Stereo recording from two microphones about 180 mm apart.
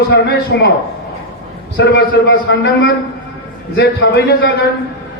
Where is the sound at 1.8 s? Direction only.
65° left (ahead or behind).